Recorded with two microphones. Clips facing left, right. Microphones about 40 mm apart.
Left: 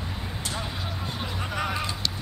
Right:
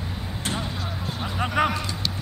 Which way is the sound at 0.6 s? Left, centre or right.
Centre.